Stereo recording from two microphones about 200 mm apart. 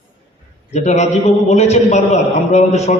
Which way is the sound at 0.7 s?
35° left (ahead or behind).